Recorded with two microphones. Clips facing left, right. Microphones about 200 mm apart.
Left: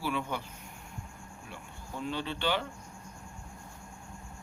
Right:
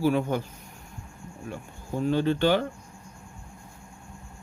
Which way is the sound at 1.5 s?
45° right (ahead or behind).